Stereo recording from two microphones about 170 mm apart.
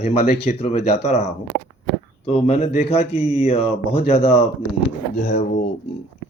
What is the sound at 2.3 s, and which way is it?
Speech, 40° left (ahead or behind).